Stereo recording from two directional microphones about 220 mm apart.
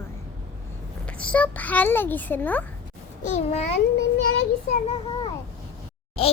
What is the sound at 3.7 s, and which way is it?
Speech, 50° left (ahead or behind).